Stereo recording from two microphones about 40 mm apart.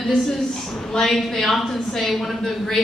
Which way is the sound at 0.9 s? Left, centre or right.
Centre.